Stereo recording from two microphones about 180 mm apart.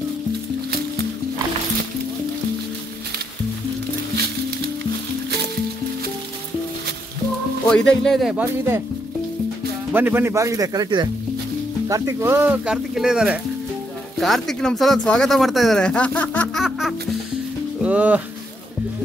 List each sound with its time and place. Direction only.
7.6 s speech: 5° left (ahead or behind)
9.9 s speech: 10° right (ahead or behind)